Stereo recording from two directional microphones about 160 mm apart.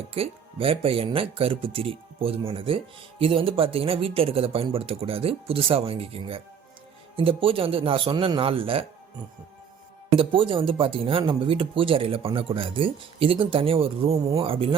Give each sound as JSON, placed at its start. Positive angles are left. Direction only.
{"t": 0.1, "sound": "speech", "side_deg": -35}
{"t": 10.2, "sound": "speech", "side_deg": -35}